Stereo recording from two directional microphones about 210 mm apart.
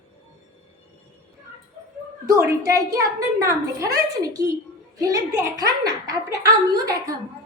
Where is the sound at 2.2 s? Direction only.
15° right (ahead or behind).